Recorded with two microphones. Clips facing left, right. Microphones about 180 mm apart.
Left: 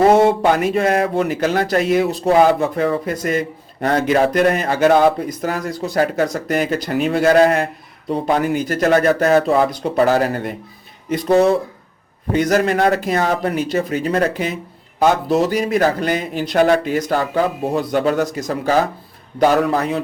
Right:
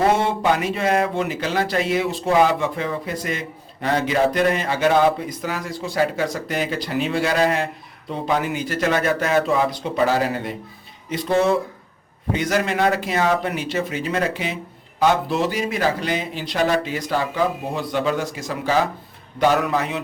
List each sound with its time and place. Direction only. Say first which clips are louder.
0.1 s a man's voice: left 6 dB; 45° left (ahead or behind)